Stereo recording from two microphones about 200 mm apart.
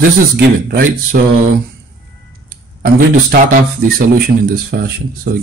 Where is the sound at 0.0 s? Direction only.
50° right (ahead or behind).